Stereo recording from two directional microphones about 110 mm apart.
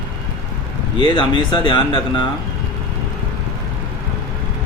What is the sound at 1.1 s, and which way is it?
Speech, 50° left (ahead or behind).